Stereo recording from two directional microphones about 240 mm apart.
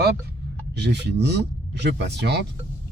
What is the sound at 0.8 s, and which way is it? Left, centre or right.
Speech, right.